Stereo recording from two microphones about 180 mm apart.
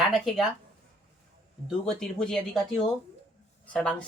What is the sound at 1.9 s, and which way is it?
Speech, 5° left (ahead or behind).